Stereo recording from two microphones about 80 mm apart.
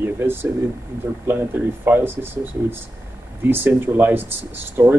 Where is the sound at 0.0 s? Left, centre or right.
Right.